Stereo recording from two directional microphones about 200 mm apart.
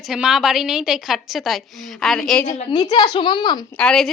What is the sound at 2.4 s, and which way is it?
A woman's voice, 20° left (ahead or behind).